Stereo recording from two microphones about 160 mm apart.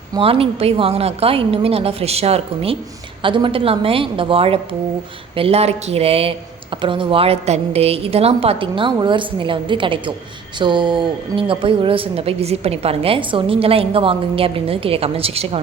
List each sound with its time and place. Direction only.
0.2 s a woman's voice: 35° right (ahead or behind)